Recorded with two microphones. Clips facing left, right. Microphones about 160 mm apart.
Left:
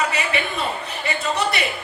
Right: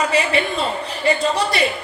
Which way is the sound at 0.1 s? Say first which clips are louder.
Right 6 dB; 30° right (ahead or behind).